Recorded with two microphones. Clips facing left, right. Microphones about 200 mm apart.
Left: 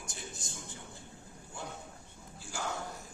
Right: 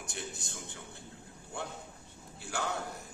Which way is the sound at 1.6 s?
60° right (ahead or behind).